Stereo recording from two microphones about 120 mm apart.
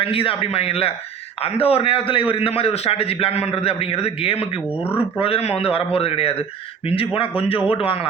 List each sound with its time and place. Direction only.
0.0 s a man's voice: 50° left (ahead or behind)